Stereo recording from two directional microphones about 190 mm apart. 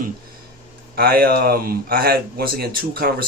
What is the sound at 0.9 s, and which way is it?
Speech, 55° right (ahead or behind).